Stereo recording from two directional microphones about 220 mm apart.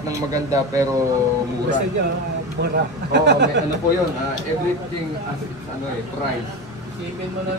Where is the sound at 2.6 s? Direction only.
50° right (ahead or behind).